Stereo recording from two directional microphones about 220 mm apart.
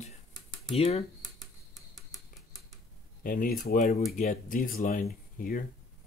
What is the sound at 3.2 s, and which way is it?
Speech, 40° left (ahead or behind).